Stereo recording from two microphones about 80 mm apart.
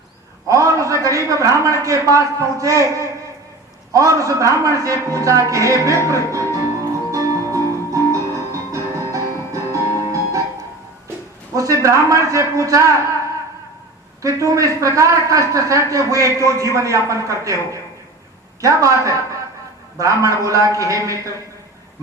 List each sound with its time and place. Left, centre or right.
0.4 s a sound: right
1.6 s a man's voice: right
7.1 s music: right
11.5 s a man's voice: right
14.2 s a man's voice: right